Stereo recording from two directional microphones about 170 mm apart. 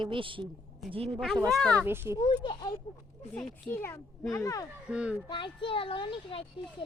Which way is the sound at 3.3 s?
5° left (ahead or behind).